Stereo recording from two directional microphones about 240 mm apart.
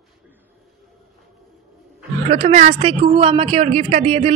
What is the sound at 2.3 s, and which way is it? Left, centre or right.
A woman's voice, right.